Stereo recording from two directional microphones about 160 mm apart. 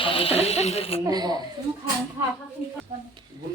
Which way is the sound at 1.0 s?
25° right (ahead or behind).